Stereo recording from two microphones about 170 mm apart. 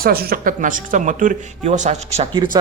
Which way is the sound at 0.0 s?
60° right (ahead or behind).